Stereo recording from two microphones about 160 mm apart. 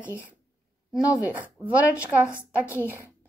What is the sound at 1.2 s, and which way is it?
Speech, 10° right (ahead or behind).